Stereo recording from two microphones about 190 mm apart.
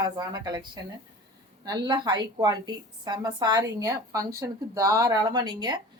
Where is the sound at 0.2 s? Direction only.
20° right (ahead or behind).